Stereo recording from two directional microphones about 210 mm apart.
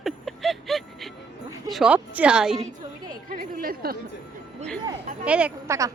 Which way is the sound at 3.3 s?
45° right (ahead or behind).